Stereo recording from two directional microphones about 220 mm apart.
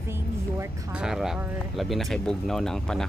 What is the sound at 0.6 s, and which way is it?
Speech, 5° right (ahead or behind).